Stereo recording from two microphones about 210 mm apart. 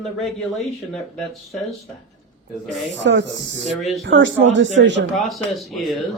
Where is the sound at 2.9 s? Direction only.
60° right (ahead or behind).